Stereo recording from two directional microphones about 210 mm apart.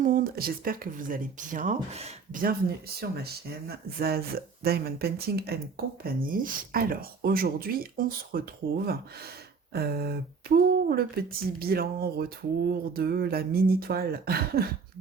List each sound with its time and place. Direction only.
0.0 s speech: 40° right (ahead or behind)
9.7 s speech: 50° right (ahead or behind)